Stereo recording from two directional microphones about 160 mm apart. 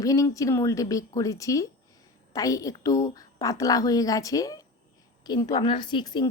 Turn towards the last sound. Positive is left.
turn(degrees=25)  # may be behind; listen again after turning